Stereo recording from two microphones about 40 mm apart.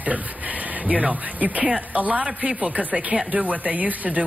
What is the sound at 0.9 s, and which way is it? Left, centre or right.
Speech, right.